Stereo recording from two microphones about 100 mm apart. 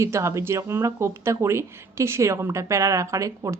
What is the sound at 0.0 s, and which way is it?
Speech, 30° right (ahead or behind).